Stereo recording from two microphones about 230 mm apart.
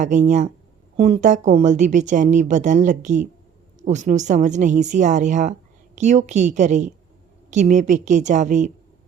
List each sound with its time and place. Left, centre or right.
0.0 s a woman's voice: right